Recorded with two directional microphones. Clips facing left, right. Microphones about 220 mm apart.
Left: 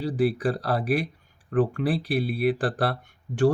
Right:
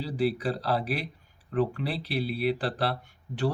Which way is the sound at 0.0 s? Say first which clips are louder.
Left 4 dB; 50° left (ahead or behind).